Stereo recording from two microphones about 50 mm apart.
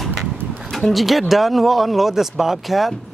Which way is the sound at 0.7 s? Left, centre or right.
Centre.